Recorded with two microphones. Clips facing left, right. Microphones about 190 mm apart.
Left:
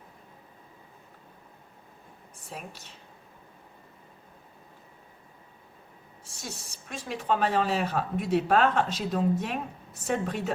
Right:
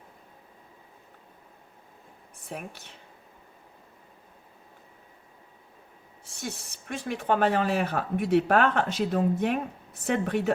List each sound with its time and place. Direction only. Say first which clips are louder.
2.5 s speech: right 3 dB; 60° right (ahead or behind)
6.3 s speech: right 5 dB; 60° right (ahead or behind)